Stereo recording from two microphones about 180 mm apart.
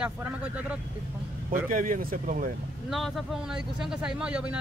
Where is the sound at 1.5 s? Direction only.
50° right (ahead or behind).